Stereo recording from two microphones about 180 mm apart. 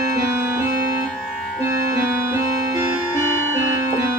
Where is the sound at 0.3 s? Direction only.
15° right (ahead or behind).